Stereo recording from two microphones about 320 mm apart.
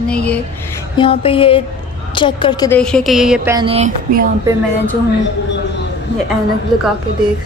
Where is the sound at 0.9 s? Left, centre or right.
Centre.